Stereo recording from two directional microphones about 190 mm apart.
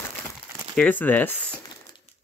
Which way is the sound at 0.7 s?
10° left (ahead or behind).